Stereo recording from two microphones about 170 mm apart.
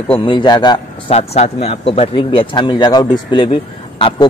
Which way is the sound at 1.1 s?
40° left (ahead or behind).